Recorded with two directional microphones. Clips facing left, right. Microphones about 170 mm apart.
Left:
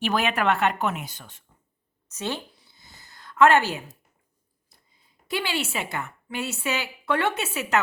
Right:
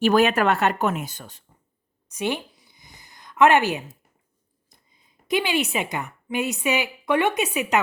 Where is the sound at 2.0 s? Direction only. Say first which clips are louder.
Right 4 dB; 15° right (ahead or behind).